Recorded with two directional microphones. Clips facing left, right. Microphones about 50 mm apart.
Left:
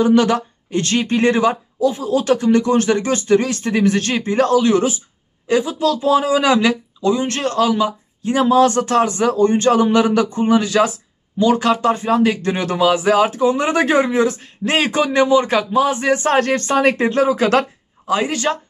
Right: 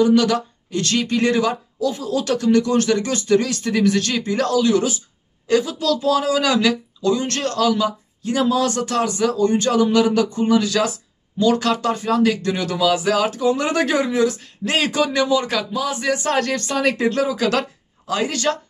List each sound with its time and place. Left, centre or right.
0.0 s speech: left